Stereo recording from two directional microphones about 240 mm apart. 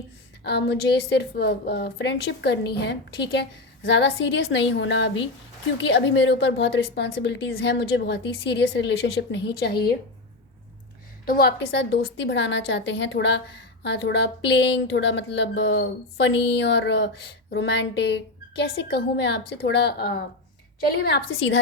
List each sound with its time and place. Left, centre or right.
0.4 s a woman's voice: left
11.3 s a woman's voice: left